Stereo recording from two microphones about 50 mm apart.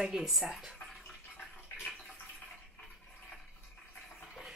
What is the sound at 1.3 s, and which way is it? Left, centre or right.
Bathtub, left.